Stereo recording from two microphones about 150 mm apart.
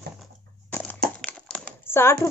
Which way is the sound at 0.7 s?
10° left (ahead or behind).